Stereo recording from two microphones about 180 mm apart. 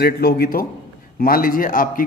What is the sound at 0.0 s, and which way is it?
A man's voice, 60° left (ahead or behind).